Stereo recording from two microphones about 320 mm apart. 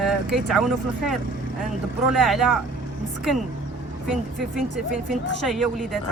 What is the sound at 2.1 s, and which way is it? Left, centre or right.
Speech, centre.